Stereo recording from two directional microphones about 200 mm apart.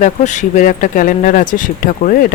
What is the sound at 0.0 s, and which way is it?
Speech, 40° left (ahead or behind).